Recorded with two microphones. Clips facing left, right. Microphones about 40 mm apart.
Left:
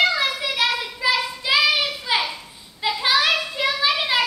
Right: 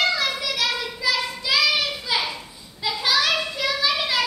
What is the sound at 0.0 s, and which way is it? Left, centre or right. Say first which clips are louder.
Child singing: left 2 dB; centre.